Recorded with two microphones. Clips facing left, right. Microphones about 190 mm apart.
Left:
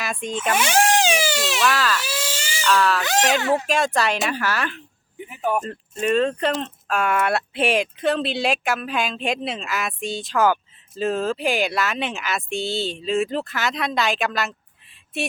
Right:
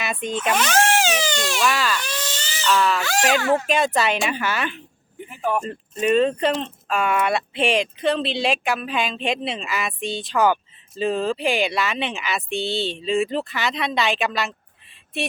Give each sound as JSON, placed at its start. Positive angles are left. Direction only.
{"t": 0.0, "sound": "speech", "side_deg": 0}
{"t": 0.5, "sound": "speech", "side_deg": 10}
{"t": 2.6, "sound": "speech", "side_deg": -10}
{"t": 3.0, "sound": "speech", "side_deg": 20}
{"t": 3.7, "sound": "speech", "side_deg": 0}